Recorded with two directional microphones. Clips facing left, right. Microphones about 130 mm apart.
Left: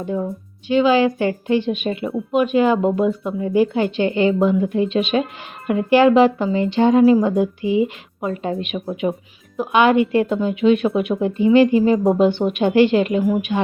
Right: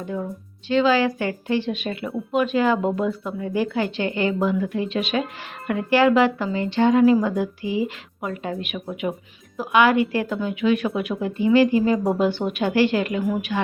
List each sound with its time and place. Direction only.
0.0 s speech: 25° left (ahead or behind)